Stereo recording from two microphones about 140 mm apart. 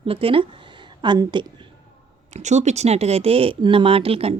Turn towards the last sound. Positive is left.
turn(degrees=-45)  # may be behind; listen again after turning